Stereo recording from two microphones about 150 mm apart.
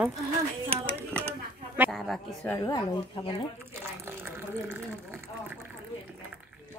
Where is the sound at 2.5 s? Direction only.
30° left (ahead or behind).